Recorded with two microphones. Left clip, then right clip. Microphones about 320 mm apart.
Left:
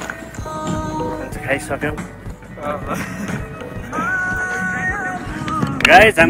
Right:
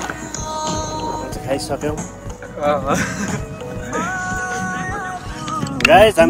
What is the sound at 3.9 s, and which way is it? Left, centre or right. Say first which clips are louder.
Music: left 3 dB; centre.